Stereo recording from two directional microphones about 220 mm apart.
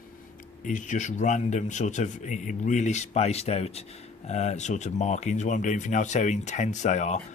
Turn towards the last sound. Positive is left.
turn(degrees=35)  # may be behind; listen again after turning